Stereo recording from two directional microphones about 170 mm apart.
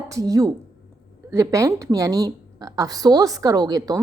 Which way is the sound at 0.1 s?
20° right (ahead or behind).